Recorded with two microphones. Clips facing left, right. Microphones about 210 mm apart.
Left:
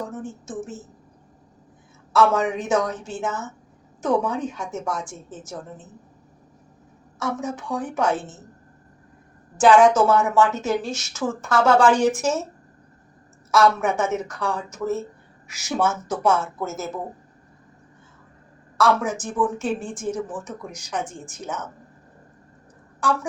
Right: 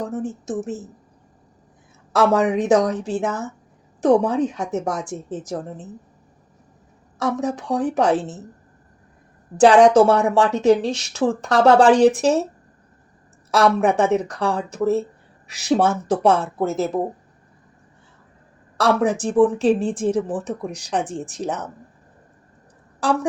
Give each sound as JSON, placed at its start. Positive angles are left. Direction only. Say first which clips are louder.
{"t": 2.1, "sound": "a woman's voice", "louder": "right 3 dB", "side_deg": -35}
{"t": 7.2, "sound": "a woman's voice", "louder": "right 5 dB", "side_deg": -35}
{"t": 8.1, "sound": "a woman's voice", "louder": "right 6 dB", "side_deg": -65}
{"t": 9.6, "sound": "a woman's voice", "louder": "right 4 dB", "side_deg": -35}
{"t": 13.5, "sound": "a woman's voice", "louder": "right 2 dB", "side_deg": -35}
{"t": 19.1, "sound": "speech", "louder": "right 7 dB", "side_deg": -65}
{"t": 19.4, "sound": "a woman's voice", "louder": "right 9 dB", "side_deg": -35}